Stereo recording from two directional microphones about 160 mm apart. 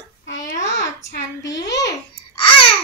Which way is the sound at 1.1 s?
90° left.